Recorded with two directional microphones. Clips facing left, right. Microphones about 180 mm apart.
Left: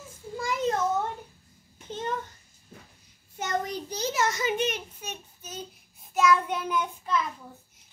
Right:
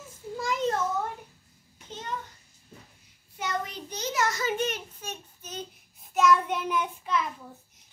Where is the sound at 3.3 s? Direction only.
45° left (ahead or behind); by 5.7 s 5° left (ahead or behind).